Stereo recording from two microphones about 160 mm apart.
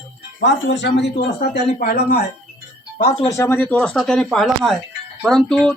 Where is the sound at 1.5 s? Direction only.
75° left (ahead or behind).